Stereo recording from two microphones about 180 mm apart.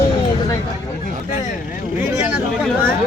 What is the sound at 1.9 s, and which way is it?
Chatter, centre (ahead or behind).